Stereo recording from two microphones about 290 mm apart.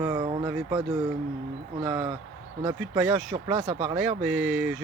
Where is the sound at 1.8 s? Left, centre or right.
Centre.